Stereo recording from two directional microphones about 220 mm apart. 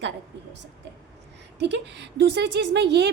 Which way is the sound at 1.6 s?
50° right (ahead or behind).